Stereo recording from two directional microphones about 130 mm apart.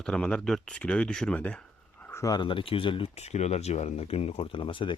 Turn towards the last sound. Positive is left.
turn(degrees=40)  # may be behind; listen again after turning